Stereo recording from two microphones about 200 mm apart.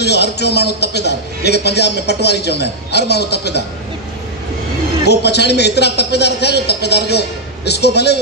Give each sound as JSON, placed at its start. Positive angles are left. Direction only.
{"t": 0.0, "sound": "a man's voice", "side_deg": 55}
{"t": 5.0, "sound": "a man's voice", "side_deg": 55}